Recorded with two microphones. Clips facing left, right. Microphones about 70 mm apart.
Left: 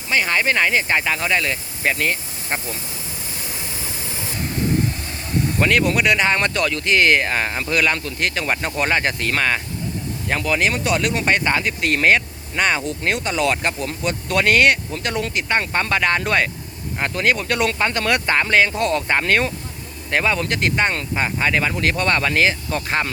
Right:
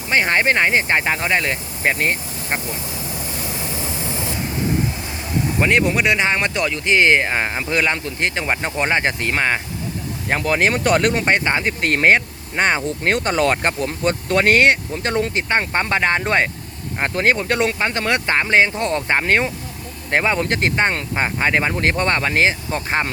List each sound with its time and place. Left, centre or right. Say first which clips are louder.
0.1 s speech: right 2 dB; right
5.5 s speech: right 1 dB; centre
10.2 s speech: right 2 dB; right; by 19.5 s centre
20.1 s speech: right 2 dB; right